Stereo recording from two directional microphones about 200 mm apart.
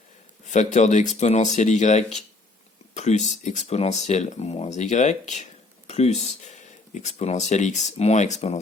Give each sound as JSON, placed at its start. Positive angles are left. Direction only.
{"t": 0.4, "sound": "speech", "side_deg": 35}